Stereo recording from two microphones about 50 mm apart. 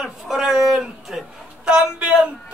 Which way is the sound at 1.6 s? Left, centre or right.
Right.